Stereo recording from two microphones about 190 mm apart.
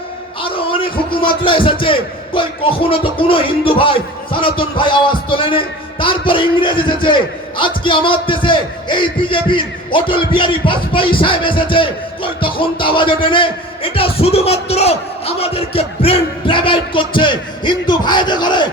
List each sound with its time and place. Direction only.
0.4 s music: 30° left (ahead or behind)
1.8 s speech: 25° left (ahead or behind)